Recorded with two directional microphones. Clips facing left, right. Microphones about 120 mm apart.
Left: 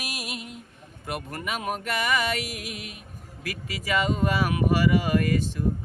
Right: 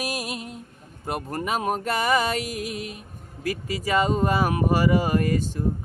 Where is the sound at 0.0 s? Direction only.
40° right (ahead or behind).